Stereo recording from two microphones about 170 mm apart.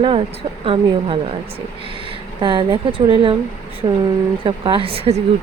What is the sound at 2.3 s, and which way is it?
Speech, 30° right (ahead or behind).